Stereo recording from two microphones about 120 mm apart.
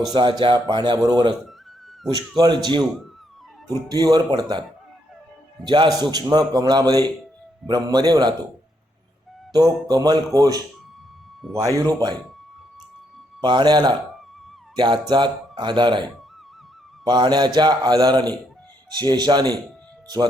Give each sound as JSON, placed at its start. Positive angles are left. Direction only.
{"t": 0.1, "sound": "a man's voice", "side_deg": -40}
{"t": 3.8, "sound": "a man's voice", "side_deg": -30}
{"t": 5.6, "sound": "a man's voice", "side_deg": -40}
{"t": 9.9, "sound": "a man's voice", "side_deg": -35}
{"t": 11.4, "sound": "a man's voice", "side_deg": 0}
{"t": 11.8, "sound": "a man's voice", "side_deg": -30}
{"t": 13.4, "sound": "a man's voice", "side_deg": -40}